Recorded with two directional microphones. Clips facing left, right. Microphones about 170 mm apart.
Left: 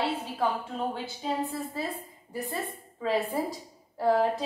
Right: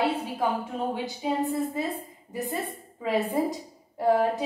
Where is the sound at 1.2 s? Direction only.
10° right (ahead or behind).